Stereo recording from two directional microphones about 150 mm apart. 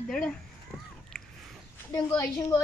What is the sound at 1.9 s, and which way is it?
Speech, 20° left (ahead or behind).